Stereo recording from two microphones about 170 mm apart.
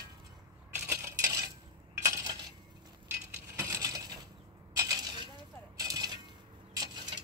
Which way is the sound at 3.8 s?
20° right (ahead or behind).